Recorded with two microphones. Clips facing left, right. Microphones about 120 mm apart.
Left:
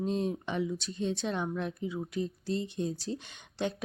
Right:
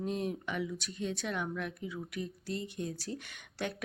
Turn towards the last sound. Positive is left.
turn(degrees=25)  # may be behind; listen again after turning